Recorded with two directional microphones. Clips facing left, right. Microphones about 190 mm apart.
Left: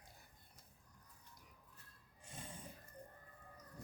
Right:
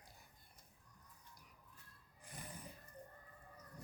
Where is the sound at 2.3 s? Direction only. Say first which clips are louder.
Even; 25° left (ahead or behind).